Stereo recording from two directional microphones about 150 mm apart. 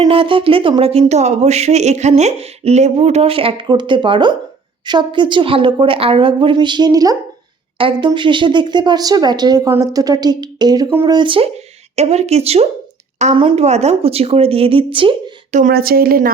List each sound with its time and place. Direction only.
0.0 s speech: 35° right (ahead or behind)
15.5 s a woman's voice: 75° right (ahead or behind)